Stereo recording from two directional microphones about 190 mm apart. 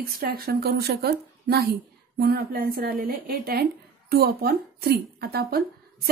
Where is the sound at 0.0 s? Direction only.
50° right (ahead or behind).